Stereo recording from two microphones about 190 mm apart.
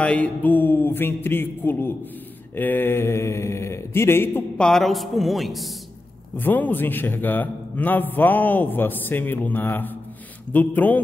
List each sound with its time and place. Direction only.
0.0 s a man's voice: 5° left (ahead or behind)